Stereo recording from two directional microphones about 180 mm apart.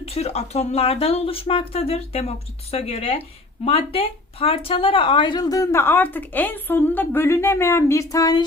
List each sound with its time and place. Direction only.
0.0 s speech: 35° left (ahead or behind)